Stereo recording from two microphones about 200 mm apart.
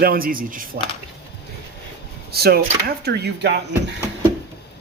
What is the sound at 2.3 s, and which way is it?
Speech, 50° right (ahead or behind).